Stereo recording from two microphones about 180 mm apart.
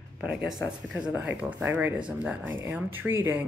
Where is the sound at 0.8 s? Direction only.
5° right (ahead or behind).